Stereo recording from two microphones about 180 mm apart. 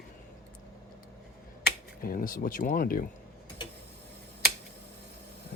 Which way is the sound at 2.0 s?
50° left (ahead or behind).